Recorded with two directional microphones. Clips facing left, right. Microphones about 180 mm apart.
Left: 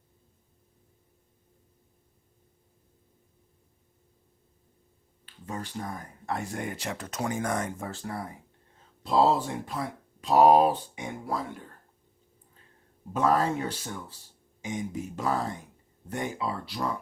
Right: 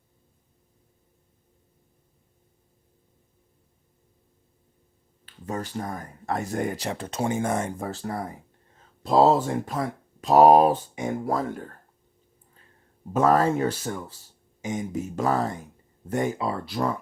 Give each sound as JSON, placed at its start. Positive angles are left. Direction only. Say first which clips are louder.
{"t": 5.2, "sound": "a sound", "louder": "right 5 dB", "side_deg": -45}
{"t": 6.2, "sound": "speech", "louder": "right 6 dB", "side_deg": -40}
{"t": 13.1, "sound": "speech", "louder": "right 5 dB", "side_deg": -45}